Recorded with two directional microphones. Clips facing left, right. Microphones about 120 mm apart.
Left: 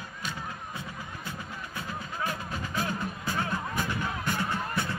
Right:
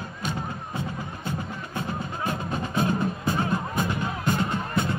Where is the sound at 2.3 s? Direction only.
25° right (ahead or behind).